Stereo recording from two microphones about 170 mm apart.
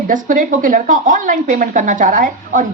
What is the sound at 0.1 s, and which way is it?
Speech, 50° right (ahead or behind).